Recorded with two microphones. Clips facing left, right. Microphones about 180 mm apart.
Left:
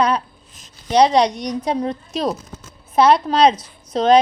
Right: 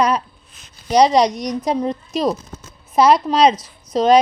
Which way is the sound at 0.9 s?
5° right (ahead or behind).